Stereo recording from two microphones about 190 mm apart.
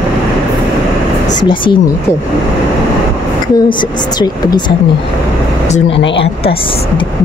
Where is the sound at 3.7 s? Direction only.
25° left (ahead or behind).